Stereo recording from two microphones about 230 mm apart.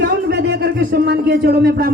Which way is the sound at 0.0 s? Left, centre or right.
Right.